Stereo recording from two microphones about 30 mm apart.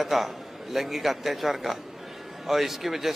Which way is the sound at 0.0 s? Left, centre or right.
Centre.